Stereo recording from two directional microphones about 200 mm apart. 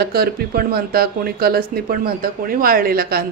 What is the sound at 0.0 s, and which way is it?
Speech, 50° right (ahead or behind).